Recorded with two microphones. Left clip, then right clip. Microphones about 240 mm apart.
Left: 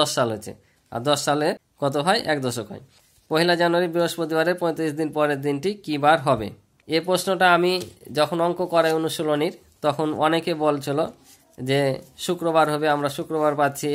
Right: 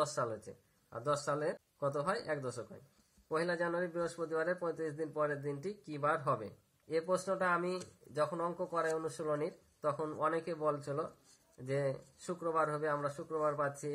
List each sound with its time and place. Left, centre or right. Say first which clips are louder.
0.0 s speech: left 14 dB; left